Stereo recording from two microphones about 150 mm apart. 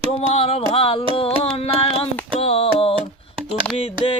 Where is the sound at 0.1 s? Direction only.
40° left (ahead or behind).